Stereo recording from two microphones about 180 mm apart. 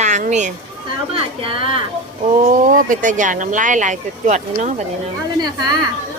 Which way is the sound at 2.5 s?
50° right (ahead or behind).